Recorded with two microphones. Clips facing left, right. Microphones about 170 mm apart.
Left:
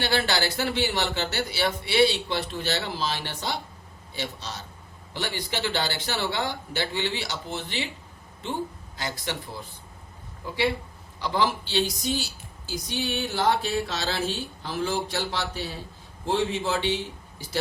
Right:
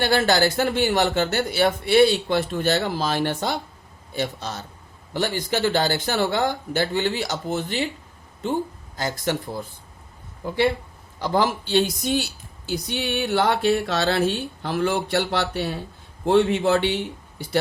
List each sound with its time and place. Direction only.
0.0 s speech: 45° right (ahead or behind)
9.0 s speech: 45° right (ahead or behind)
10.4 s a woman's voice: 50° right (ahead or behind)